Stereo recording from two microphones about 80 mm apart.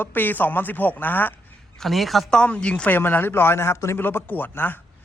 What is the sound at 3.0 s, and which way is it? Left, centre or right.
A man's voice, left.